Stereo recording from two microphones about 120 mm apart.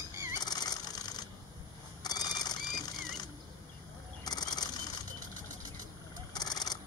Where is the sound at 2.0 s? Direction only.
35° left (ahead or behind).